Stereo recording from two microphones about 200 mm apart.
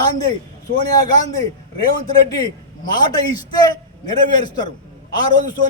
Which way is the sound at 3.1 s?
20° left (ahead or behind).